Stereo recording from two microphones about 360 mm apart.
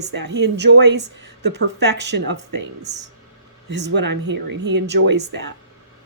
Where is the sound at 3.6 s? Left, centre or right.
Right.